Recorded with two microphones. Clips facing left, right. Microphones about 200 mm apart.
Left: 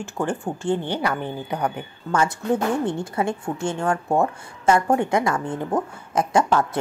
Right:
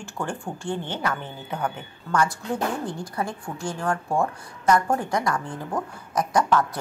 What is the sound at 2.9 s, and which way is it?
A woman's voice, 25° left (ahead or behind).